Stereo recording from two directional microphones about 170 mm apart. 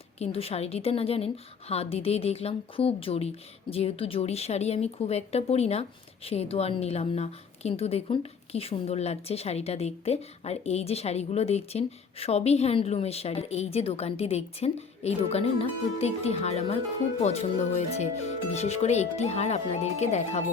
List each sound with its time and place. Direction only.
0.2 s a woman's voice: 35° left (ahead or behind)